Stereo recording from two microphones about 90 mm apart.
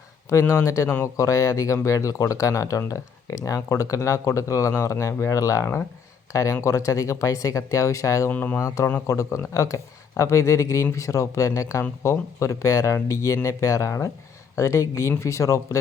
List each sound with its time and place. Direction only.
0.3 s speech: 35° left (ahead or behind)
8.3 s speech: 20° left (ahead or behind)
8.5 s speech: 35° left (ahead or behind)